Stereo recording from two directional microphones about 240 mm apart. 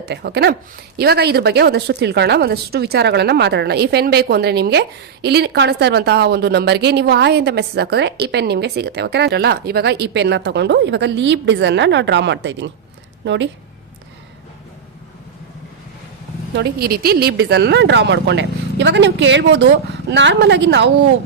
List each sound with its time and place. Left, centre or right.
0.0 s a woman's voice: right
16.6 s a woman's voice: right